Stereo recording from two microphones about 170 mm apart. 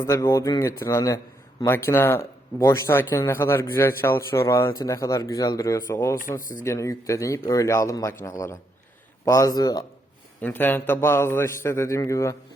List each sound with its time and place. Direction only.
0.0 s a man's voice: 15° left (ahead or behind)
10.4 s a man's voice: 10° left (ahead or behind)